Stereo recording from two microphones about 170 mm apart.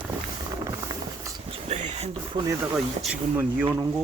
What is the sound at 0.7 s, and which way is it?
Train, 20° right (ahead or behind).